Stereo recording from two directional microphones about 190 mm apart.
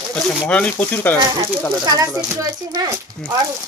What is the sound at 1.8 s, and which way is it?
Speech, 20° right (ahead or behind).